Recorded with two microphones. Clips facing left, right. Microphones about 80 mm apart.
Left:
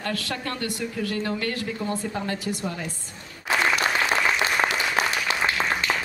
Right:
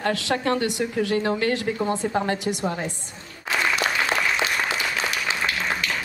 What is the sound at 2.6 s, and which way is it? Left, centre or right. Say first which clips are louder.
Speech: right 4 dB; right.